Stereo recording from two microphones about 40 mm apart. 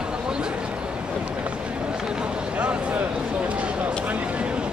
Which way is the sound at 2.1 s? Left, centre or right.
Right.